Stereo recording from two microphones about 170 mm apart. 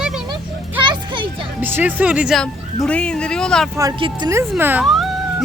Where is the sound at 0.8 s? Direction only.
30° right (ahead or behind).